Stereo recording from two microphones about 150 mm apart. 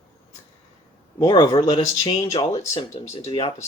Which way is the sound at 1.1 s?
25° left (ahead or behind).